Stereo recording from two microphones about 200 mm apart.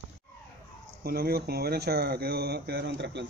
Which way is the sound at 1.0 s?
50° right (ahead or behind).